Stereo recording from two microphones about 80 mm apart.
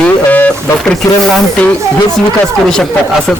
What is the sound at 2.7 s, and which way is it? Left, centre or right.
Speech, centre.